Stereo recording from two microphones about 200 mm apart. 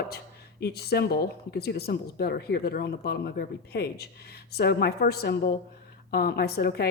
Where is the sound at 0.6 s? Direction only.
50° left (ahead or behind).